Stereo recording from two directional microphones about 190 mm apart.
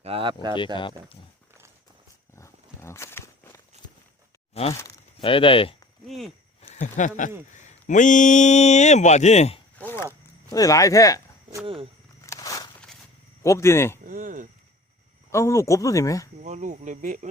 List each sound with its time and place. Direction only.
0.0 s speech: 30° right (ahead or behind)
2.3 s walk: 15° left (ahead or behind)
4.6 s speech: 30° left (ahead or behind)
6.1 s walk: centre (ahead or behind)
6.6 s a sound: 35° left (ahead or behind)
7.5 s speech: 40° left (ahead or behind)
9.7 s chop: 10° left (ahead or behind)
10.5 s speech: 20° left (ahead or behind)
11.6 s a sound: 30° right (ahead or behind)
12.2 s walk: 15° left (ahead or behind)
13.4 s speech: 15° left (ahead or behind)
14.0 s a sound: 45° right (ahead or behind)
15.3 s speech: 15° left (ahead or behind)
16.4 s speech: 40° right (ahead or behind)